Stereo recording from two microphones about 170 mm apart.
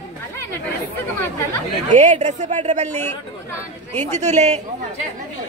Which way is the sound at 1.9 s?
45° right (ahead or behind).